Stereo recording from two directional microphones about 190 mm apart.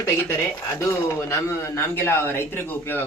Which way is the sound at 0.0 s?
15° left (ahead or behind).